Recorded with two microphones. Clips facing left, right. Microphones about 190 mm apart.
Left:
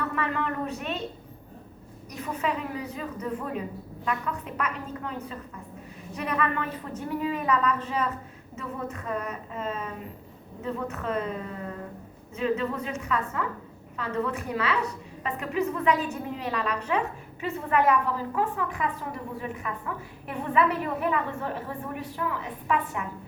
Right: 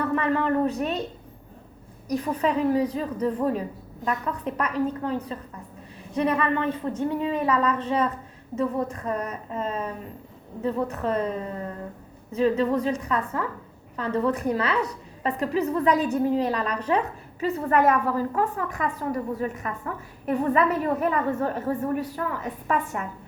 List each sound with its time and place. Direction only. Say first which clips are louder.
0.2 s a sound: right 7 dB; 35° right (ahead or behind)
2.0 s a woman's voice: right 6 dB; 35° right (ahead or behind)
12.3 s a woman's voice: right 6 dB; 35° right (ahead or behind)